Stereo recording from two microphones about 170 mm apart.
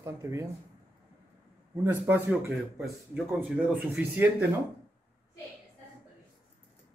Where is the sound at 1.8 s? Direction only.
10° right (ahead or behind).